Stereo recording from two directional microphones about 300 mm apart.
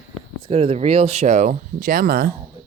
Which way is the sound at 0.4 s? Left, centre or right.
Centre.